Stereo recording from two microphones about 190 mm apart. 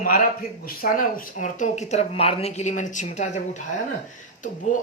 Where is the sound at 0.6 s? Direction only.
50° left (ahead or behind).